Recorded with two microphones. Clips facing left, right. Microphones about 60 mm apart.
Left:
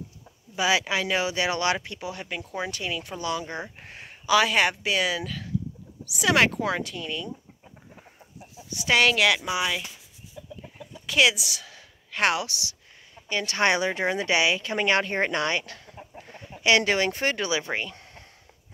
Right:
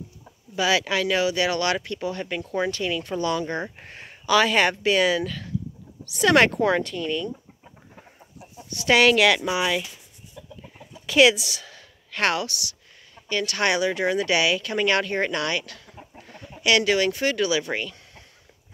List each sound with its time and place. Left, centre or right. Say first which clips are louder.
0.6 s speech: right 2 dB; centre
7.9 s chicken: right 2 dB; centre
8.5 s speech: right 3 dB; centre
11.1 s a woman's voice: right 5 dB; centre; by 15.9 s left
16.2 s chicken: right 2 dB; left
16.6 s speech: right 1 dB; left